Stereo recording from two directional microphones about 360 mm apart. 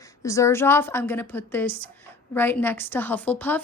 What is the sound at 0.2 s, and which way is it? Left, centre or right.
A woman's voice, centre.